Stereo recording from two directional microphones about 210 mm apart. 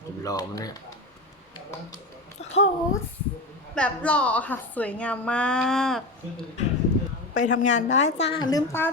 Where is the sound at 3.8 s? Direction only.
5° left (ahead or behind).